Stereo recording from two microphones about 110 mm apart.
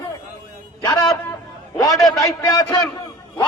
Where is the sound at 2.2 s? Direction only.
35° left (ahead or behind).